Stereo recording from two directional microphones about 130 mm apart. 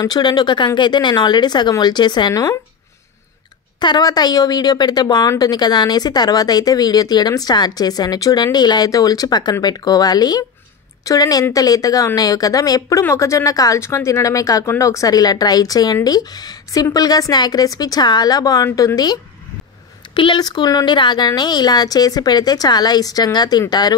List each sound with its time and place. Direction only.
0.0 s speech: 35° left (ahead or behind)
3.8 s speech: 30° left (ahead or behind)
20.2 s speech: 35° left (ahead or behind)